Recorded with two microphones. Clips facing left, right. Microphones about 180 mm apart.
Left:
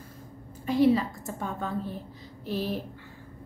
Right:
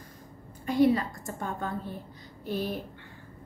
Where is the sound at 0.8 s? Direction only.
5° left (ahead or behind).